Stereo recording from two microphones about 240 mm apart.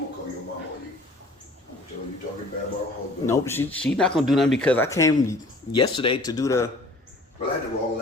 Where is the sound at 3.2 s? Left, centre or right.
Centre.